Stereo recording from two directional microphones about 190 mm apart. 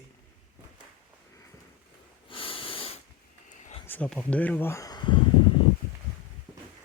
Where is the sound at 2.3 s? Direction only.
30° left (ahead or behind).